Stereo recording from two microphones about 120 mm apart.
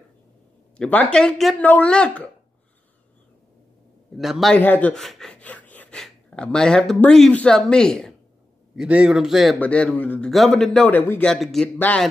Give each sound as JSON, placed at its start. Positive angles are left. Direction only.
{"t": 0.7, "sound": "a man's voice", "side_deg": 10}
{"t": 4.2, "sound": "a man's voice", "side_deg": 0}
{"t": 4.6, "sound": "a man's voice", "side_deg": 15}
{"t": 8.7, "sound": "a man's voice", "side_deg": -10}
{"t": 9.6, "sound": "a man's voice", "side_deg": 10}
{"t": 10.3, "sound": "a man's voice", "side_deg": 0}